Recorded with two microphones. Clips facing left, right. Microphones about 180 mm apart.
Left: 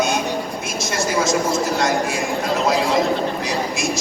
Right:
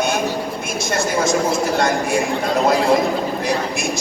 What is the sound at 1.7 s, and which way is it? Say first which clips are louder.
Speech: right 2 dB; 55° right (ahead or behind).